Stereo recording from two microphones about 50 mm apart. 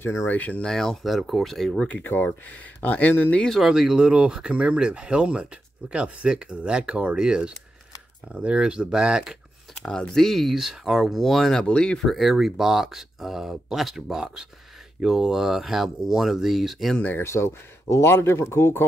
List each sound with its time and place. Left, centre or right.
0.3 s speech: left
0.7 s speech: centre
1.7 s speech: centre
2.0 s speech: left
3.6 s speech: centre
9.8 s speech: centre
11.6 s speech: centre
12.2 s speech: centre
16.9 s speech: left
17.2 s speech: left
18.0 s speech: left